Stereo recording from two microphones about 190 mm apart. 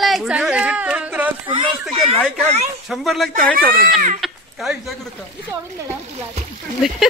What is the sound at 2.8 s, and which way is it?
Speech, centre (ahead or behind).